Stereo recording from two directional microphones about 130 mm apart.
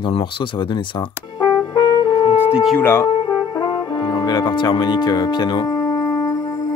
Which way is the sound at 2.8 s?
20° left (ahead or behind).